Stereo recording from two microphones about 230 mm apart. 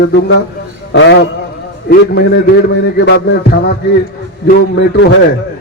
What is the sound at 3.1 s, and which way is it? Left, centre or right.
Speech, left.